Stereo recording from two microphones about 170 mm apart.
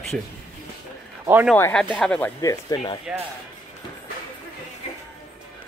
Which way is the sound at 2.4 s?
20° left (ahead or behind).